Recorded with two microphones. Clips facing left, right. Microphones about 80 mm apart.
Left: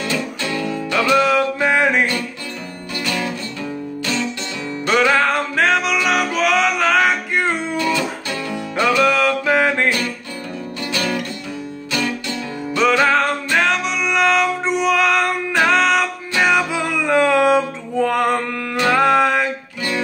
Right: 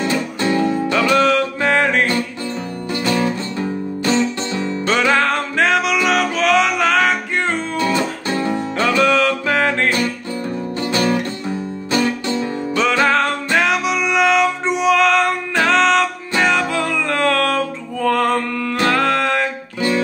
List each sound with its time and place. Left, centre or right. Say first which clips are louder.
0.0 s music: right 4 dB; right
1.1 s music: left 2 dB; centre
2.9 s music: right 5 dB; right
5.2 s music: even; centre
7.7 s music: right 1 dB; right
9.0 s music: right 1 dB; centre
10.8 s music: right 4 dB; right
12.7 s music: left 2 dB; centre
13.0 s music: even; centre